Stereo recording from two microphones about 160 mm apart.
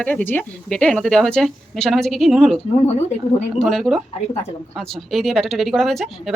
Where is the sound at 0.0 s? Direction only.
10° left (ahead or behind).